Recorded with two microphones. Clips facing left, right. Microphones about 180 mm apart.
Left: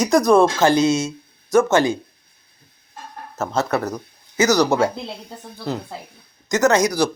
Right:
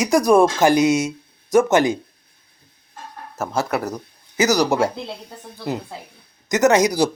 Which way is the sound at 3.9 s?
15° right (ahead or behind).